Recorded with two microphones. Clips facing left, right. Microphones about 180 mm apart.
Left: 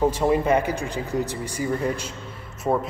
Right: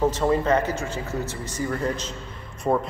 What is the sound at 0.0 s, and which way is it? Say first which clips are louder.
A man's voice: left 1 dB; 15° left (ahead or behind).